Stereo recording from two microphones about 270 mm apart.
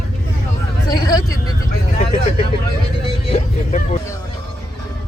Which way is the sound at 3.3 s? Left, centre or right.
Left.